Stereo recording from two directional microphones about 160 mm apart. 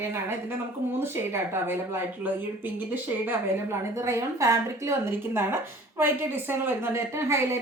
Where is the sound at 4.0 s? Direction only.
15° right (ahead or behind).